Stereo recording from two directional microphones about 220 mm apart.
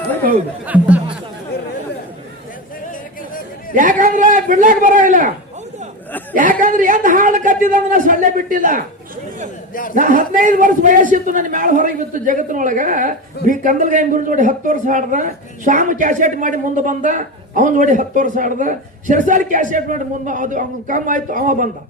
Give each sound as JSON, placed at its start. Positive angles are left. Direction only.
{"t": 0.6, "sound": "speech", "side_deg": -5}
{"t": 2.9, "sound": "a sound", "side_deg": 40}
{"t": 3.8, "sound": "a man's voice", "side_deg": -35}
{"t": 6.3, "sound": "a man's voice", "side_deg": -35}
{"t": 9.9, "sound": "a man's voice", "side_deg": -35}